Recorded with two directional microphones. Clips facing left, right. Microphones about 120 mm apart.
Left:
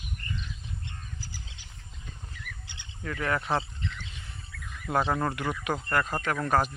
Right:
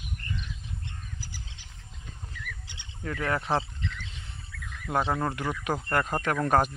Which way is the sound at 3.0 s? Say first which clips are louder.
Even; 25° right (ahead or behind).